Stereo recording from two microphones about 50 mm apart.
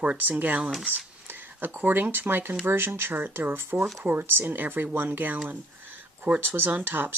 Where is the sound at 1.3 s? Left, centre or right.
Right.